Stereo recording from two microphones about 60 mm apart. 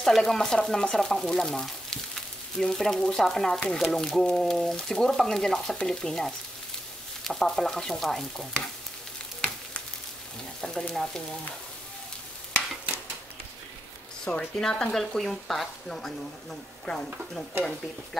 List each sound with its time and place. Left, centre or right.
0.0 s speech: centre
10.6 s speech: centre
14.3 s speech: centre